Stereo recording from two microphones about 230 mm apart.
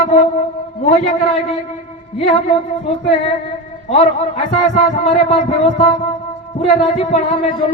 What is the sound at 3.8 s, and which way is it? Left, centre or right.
A man's voice, left.